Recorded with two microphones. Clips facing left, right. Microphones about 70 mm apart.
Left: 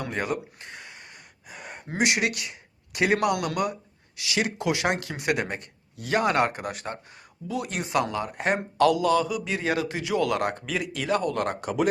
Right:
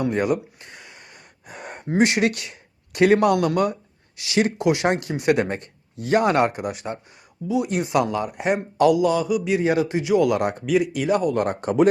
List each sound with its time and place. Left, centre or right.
0.2 s speech: left
2.0 s a man's voice: right
6.6 s a man's voice: centre
8.4 s speech: centre
8.8 s a man's voice: centre